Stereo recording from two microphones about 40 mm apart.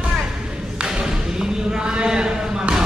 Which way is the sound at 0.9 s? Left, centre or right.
Centre.